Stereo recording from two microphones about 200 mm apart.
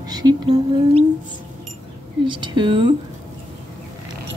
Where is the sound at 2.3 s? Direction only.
25° right (ahead or behind).